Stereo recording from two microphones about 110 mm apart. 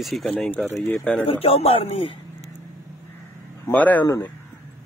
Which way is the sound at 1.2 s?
60° left (ahead or behind).